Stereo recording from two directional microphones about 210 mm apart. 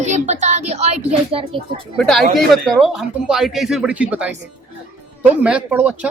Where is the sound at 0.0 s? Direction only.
35° right (ahead or behind).